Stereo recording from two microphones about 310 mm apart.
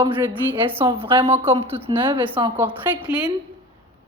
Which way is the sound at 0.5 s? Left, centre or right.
Centre.